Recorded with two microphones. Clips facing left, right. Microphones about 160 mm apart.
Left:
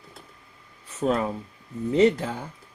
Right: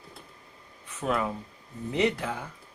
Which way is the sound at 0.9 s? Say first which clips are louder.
Left 5 dB; 35° left (ahead or behind).